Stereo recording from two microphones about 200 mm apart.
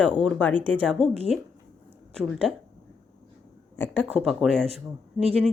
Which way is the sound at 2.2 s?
5° left (ahead or behind).